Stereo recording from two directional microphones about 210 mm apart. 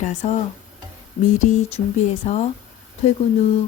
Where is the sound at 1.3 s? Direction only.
35° left (ahead or behind).